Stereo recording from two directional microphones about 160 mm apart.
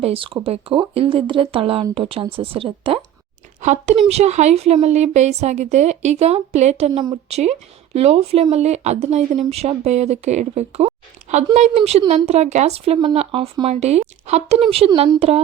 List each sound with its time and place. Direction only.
0.0 s speech: 35° right (ahead or behind)
3.6 s speech: 45° right (ahead or behind)